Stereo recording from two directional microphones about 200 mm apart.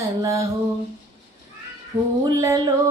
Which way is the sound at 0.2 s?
15° right (ahead or behind).